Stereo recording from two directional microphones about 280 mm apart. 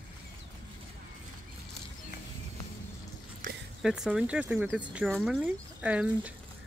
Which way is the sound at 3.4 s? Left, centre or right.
Right.